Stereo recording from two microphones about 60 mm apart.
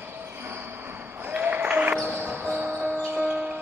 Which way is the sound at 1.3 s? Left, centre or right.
Right.